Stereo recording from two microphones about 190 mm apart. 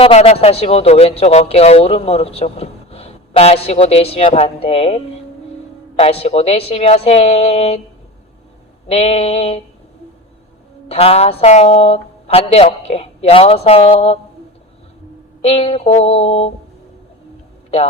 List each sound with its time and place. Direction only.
0.0 s speech: 30° left (ahead or behind)
6.0 s speech: 35° left (ahead or behind)
8.9 s speech: 30° left (ahead or behind)
10.8 s speech: 30° left (ahead or behind)
15.4 s speech: 30° left (ahead or behind)